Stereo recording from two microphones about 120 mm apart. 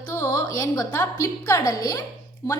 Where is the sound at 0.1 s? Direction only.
25° left (ahead or behind).